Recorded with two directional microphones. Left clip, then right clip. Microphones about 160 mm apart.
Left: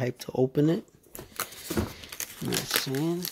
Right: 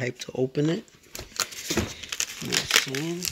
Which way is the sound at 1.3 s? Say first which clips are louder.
Right 5 dB; 15° left (ahead or behind).